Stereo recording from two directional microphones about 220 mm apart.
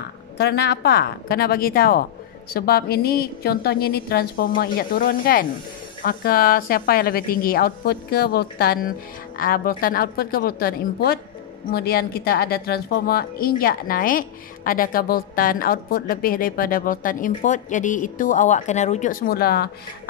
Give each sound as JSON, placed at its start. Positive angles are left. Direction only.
{"t": 0.4, "sound": "a woman's voice", "side_deg": 50}